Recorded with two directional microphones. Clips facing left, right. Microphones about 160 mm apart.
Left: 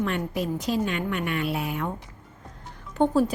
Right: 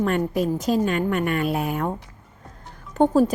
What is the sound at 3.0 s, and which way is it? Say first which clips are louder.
Speech: right 4 dB; 45° right (ahead or behind).